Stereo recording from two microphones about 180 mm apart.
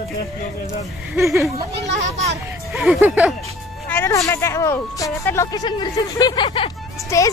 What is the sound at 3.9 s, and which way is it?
Speech, 15° left (ahead or behind).